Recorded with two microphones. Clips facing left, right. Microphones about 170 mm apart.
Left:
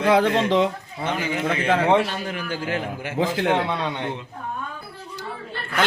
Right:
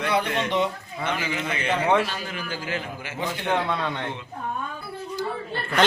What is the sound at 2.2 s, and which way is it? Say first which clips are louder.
Speech: left 4 dB; 55° left (ahead or behind).